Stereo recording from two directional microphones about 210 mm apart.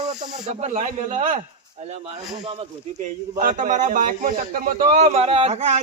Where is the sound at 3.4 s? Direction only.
40° right (ahead or behind).